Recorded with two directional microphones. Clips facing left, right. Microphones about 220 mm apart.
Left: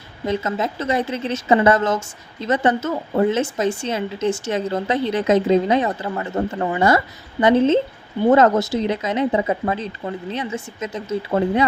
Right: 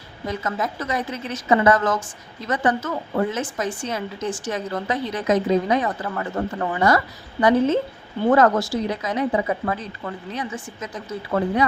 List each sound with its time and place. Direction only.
0.3 s a woman's voice: 25° left (ahead or behind)